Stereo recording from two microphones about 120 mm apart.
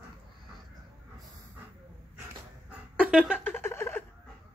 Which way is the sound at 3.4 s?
20° left (ahead or behind).